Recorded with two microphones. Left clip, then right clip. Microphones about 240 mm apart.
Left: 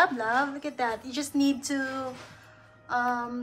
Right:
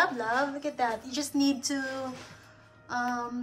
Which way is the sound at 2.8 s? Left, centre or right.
Centre.